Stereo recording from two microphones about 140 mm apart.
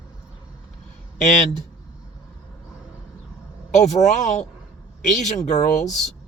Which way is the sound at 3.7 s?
55° left (ahead or behind).